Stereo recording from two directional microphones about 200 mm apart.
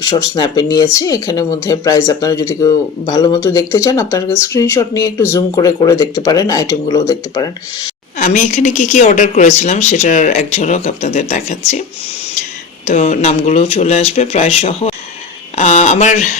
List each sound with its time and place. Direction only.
0.0 s speech: 15° left (ahead or behind)
8.2 s a woman's voice: 35° left (ahead or behind)
12.8 s a woman's voice: 35° left (ahead or behind)